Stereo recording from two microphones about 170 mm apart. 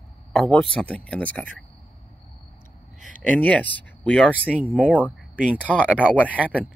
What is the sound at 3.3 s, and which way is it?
Speech, 10° left (ahead or behind).